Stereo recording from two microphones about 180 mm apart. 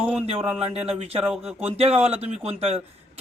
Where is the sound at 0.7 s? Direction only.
35° right (ahead or behind).